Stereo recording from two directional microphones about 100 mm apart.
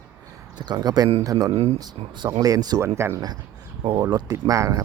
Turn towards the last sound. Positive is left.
turn(degrees=-35)  # may be behind; listen again after turning